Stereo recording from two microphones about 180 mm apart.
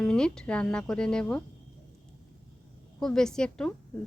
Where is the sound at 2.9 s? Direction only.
5° left (ahead or behind).